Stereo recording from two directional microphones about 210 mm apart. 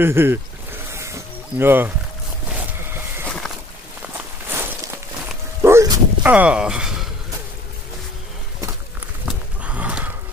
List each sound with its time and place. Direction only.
0.0 s speech: 10° right (ahead or behind)
0.9 s a sound: 15° right (ahead or behind)
2.5 s boat: 10° right (ahead or behind)
3.3 s a sound: centre (ahead or behind)
4.5 s walk: 10° right (ahead or behind)
5.6 s dog: 15° right (ahead or behind)
9.6 s gasp: 5° right (ahead or behind)